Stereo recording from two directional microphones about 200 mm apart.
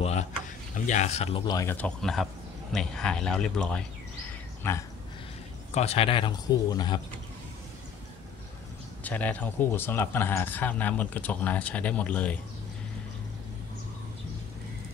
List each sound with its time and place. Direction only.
0.0 s speech: 35° left (ahead or behind)
1.5 s a man's voice: 15° left (ahead or behind)
5.8 s speech: 30° left (ahead or behind)
9.0 s a man's voice: 5° left (ahead or behind)